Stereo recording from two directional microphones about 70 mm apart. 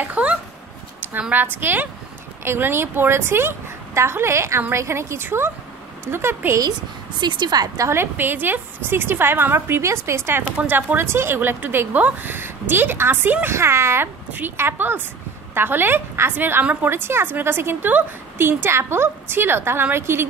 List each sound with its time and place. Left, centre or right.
0.0 s a sound: centre
1.3 s a woman's voice: right
7.2 s speech: right
7.9 s a woman's voice: right
10.6 s a woman's voice: right
11.1 s a woman's voice: right
14.3 s a woman's voice: right